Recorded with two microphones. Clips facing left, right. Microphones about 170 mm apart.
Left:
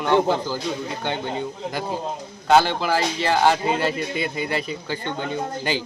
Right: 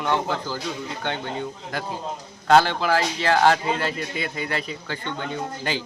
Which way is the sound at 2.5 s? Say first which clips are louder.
Even; centre (ahead or behind).